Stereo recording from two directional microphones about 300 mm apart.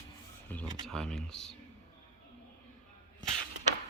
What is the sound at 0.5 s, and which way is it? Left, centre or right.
Speech, centre.